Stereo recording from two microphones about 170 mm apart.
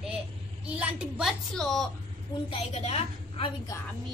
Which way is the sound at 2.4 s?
35° left (ahead or behind).